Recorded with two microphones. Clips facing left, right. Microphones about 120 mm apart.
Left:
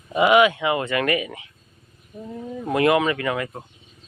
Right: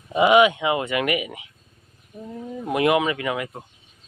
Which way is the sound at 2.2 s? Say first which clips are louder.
Left 1 dB; 5° left (ahead or behind).